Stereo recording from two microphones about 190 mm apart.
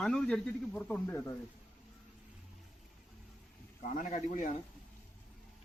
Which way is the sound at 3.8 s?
40° left (ahead or behind).